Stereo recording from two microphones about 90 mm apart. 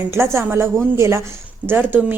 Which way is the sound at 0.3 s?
30° right (ahead or behind).